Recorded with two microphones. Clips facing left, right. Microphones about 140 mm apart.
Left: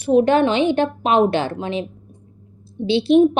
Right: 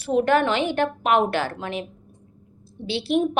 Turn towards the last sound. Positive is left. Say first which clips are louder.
# left 8 dB
turn(degrees=20)  # may be behind; listen again after turning